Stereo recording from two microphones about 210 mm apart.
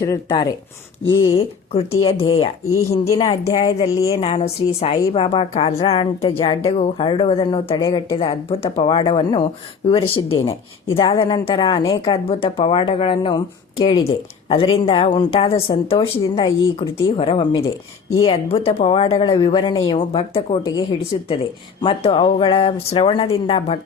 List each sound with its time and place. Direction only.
0.0 s speech: 20° left (ahead or behind)
1.0 s speech: 65° left (ahead or behind)
2.0 s a woman's voice: 25° left (ahead or behind)
2.7 s speech: 15° left (ahead or behind)
4.2 s a woman's voice: 25° left (ahead or behind)